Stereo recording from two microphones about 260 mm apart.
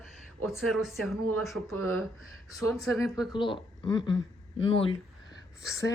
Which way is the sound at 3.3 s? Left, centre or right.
Centre.